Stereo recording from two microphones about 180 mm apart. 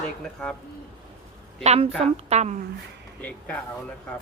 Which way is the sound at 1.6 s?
35° right (ahead or behind).